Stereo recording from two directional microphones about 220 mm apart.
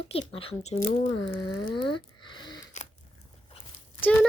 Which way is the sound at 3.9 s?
10° left (ahead or behind).